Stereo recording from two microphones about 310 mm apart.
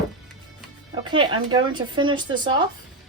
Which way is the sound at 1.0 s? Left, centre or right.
Centre.